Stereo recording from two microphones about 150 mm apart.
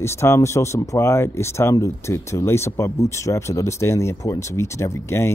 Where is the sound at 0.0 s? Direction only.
15° left (ahead or behind).